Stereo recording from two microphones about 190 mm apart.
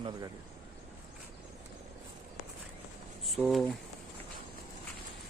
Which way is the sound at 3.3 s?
Centre (ahead or behind).